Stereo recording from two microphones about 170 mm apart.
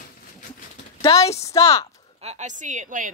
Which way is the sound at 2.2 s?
45° right (ahead or behind).